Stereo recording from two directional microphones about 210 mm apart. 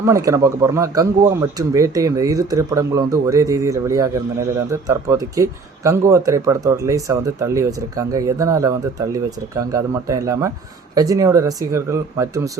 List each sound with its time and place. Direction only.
0.0 s speech: 15° right (ahead or behind)